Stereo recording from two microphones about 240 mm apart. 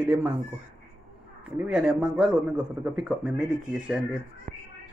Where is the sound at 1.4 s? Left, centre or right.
Centre.